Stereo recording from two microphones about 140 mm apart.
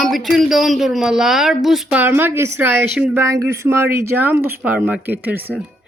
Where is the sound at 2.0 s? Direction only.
15° right (ahead or behind).